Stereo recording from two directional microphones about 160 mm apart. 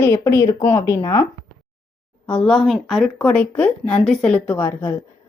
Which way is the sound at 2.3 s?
5° left (ahead or behind).